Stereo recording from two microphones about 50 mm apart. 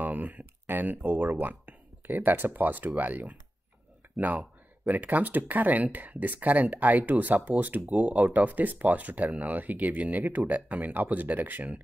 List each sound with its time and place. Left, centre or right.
0.0 s a sound: right
0.7 s speech: right
4.8 s speech: right